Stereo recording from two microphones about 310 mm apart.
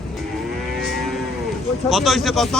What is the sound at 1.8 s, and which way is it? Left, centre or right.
Speech, centre.